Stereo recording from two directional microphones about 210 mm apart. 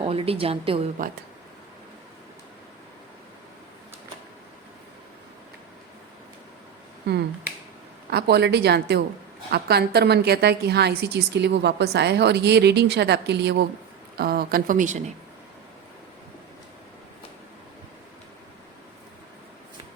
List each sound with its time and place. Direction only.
0.0 s a woman's voice: 25° right (ahead or behind)
8.1 s a woman's voice: 50° right (ahead or behind); by 15.1 s 35° right (ahead or behind)